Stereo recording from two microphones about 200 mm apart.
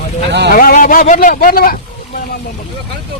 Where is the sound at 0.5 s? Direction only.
45° left (ahead or behind).